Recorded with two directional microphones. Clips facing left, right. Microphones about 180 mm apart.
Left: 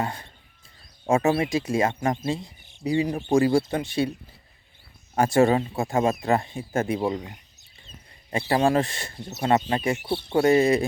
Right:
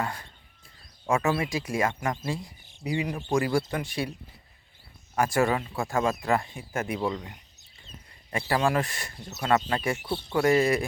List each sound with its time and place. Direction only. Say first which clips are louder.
0.0 s speech: left 3 dB; 20° left (ahead or behind)
5.1 s speech: left 5 dB; 25° left (ahead or behind)
8.3 s speech: left 4 dB; 25° left (ahead or behind)